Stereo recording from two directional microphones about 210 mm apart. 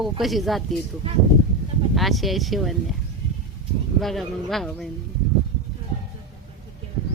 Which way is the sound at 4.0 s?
Centre (ahead or behind).